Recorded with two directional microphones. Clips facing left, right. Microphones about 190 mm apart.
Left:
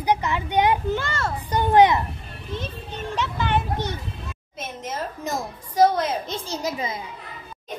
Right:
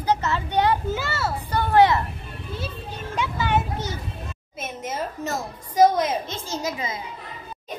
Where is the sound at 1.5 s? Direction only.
15° left (ahead or behind).